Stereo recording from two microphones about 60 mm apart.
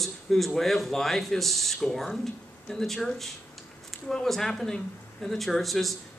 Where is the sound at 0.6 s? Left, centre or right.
Centre.